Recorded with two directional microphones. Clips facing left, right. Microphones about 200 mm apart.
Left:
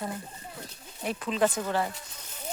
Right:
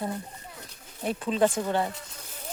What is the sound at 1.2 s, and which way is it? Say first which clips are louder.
Speech: right 2 dB; 30° right (ahead or behind).